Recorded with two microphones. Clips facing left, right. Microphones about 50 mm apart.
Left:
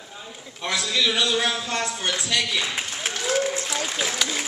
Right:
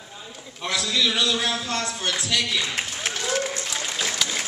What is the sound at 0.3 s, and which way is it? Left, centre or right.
A man's voice, centre.